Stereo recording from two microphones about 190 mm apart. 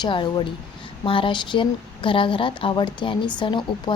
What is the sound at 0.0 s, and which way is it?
A woman's voice, 25° left (ahead or behind).